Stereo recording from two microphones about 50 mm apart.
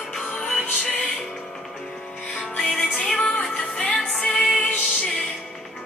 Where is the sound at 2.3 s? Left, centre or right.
Left.